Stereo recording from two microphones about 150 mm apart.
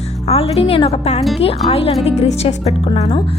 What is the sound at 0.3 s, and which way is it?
A woman's voice, 40° left (ahead or behind).